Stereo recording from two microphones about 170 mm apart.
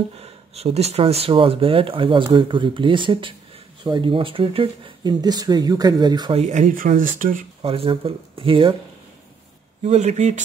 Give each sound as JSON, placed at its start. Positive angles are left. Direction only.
{"t": 0.2, "sound": "speech", "side_deg": -35}
{"t": 6.4, "sound": "speech", "side_deg": -45}
{"t": 7.6, "sound": "speech", "side_deg": -35}
{"t": 9.8, "sound": "speech", "side_deg": -40}